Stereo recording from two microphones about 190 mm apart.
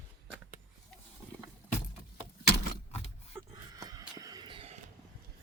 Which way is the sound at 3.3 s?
10° right (ahead or behind).